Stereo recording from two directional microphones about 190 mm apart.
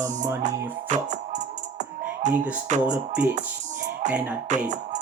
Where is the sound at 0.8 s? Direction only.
40° right (ahead or behind).